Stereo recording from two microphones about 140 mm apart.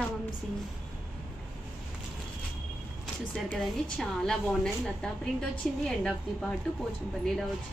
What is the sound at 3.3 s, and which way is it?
A woman's voice, 5° left (ahead or behind).